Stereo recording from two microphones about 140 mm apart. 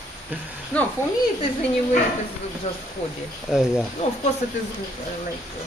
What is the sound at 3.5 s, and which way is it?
Speech, 5° right (ahead or behind).